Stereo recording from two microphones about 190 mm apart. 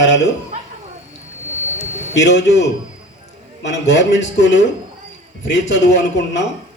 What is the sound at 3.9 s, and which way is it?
Speech, 70° left (ahead or behind).